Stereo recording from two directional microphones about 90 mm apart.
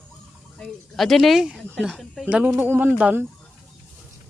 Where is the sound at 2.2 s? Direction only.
20° right (ahead or behind).